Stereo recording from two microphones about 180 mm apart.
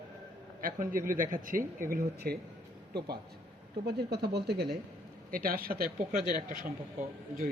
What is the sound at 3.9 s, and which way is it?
Speech, 65° right (ahead or behind).